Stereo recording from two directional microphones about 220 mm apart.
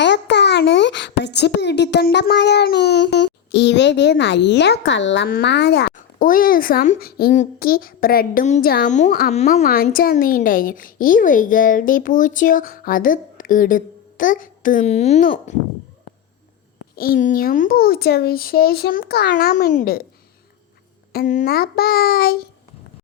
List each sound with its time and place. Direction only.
0.0 s a woman's voice: 50° left (ahead or behind); by 15.5 s 35° left (ahead or behind)
16.9 s a child's voice: 40° left (ahead or behind)
21.1 s a child's voice: 40° left (ahead or behind)